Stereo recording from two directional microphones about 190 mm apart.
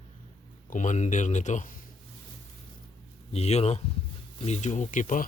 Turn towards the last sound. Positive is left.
turn(degrees=40)  # may be behind; listen again after turning